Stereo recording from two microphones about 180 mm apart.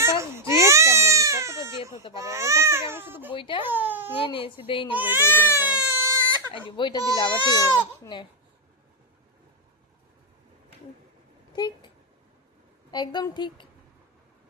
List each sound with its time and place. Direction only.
0.0 s baby cry: 15° right (ahead or behind)
3.3 s baby cry: 30° left (ahead or behind)
3.7 s baby cry: 10° right (ahead or behind)
4.2 s speech: 30° left (ahead or behind)
4.9 s speech: 10° right (ahead or behind)
5.2 s speech: 15° left (ahead or behind)
5.6 s a sound: 10° right (ahead or behind)
6.5 s speech: 25° left (ahead or behind)
11.5 s speech: 25° left (ahead or behind)
12.9 s speech: 25° left (ahead or behind)